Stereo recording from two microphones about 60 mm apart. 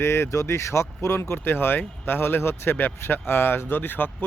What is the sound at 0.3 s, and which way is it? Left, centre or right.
Speech, left.